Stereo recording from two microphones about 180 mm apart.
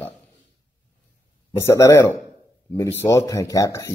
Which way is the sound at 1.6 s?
15° left (ahead or behind).